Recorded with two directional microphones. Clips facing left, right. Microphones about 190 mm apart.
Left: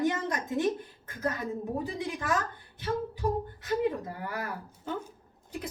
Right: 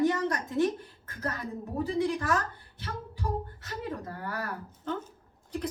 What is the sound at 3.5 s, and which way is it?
A woman's voice, 15° left (ahead or behind).